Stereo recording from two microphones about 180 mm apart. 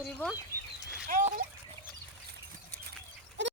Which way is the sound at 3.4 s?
90° right.